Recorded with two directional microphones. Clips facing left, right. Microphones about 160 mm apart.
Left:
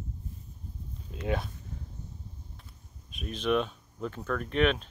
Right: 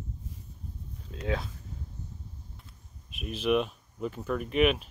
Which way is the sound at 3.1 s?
5° right (ahead or behind).